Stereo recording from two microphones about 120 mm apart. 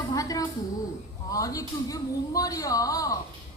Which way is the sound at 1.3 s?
30° left (ahead or behind).